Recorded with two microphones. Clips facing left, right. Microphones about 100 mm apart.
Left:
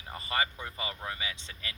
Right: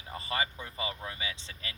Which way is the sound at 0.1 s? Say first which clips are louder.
Left 1 dB; 25° right (ahead or behind).